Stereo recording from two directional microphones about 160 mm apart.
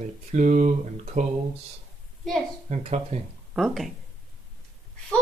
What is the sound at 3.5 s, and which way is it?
Child singing, centre (ahead or behind).